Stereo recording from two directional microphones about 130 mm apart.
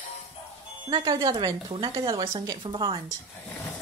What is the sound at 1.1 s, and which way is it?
A woman's voice, 25° right (ahead or behind).